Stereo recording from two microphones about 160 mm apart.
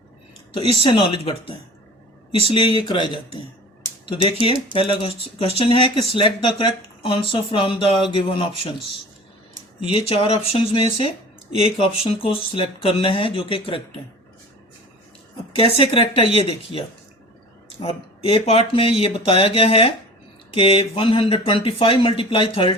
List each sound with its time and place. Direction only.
0.5 s speech: 35° left (ahead or behind)
9.9 s speech: 35° left (ahead or behind)
15.5 s speech: 35° left (ahead or behind)